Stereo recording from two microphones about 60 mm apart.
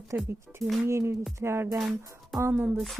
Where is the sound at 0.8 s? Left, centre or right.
Right.